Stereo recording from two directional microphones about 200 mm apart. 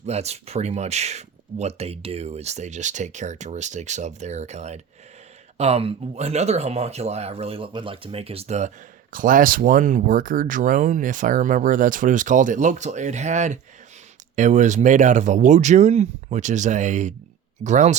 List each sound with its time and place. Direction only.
0.0 s speech: 35° right (ahead or behind)